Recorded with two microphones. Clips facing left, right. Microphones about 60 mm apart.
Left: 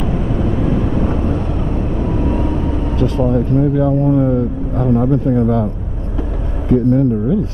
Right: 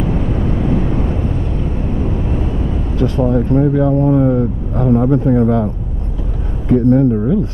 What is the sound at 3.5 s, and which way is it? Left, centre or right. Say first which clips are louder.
Speech: right 2 dB; right.